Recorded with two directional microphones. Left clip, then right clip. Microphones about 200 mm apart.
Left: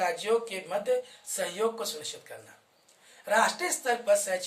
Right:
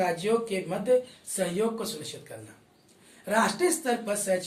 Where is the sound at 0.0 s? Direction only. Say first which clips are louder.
Right 1 dB; 20° left (ahead or behind).